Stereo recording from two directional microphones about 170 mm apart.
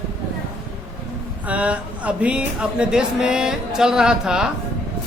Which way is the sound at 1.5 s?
10° right (ahead or behind).